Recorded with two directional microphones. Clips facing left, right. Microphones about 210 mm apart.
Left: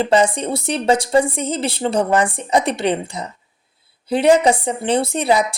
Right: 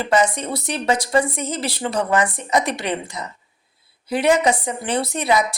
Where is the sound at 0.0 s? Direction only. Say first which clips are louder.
Left 3 dB; 30° left (ahead or behind).